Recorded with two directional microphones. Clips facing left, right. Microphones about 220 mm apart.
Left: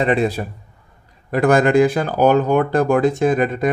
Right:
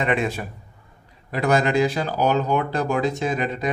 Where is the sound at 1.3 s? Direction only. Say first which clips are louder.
Left 6 dB; 50° left (ahead or behind).